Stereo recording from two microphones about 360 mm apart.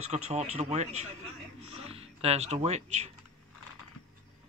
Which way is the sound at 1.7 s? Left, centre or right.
Centre.